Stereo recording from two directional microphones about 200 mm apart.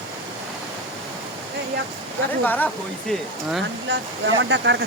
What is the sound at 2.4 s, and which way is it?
Speech, 10° left (ahead or behind).